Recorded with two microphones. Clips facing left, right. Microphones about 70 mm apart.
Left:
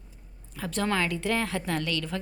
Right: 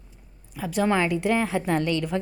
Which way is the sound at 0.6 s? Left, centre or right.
Centre.